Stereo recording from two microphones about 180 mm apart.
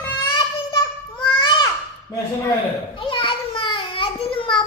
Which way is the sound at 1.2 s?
25° left (ahead or behind).